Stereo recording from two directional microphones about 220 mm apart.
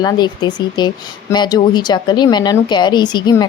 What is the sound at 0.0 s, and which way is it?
Speech, 20° left (ahead or behind).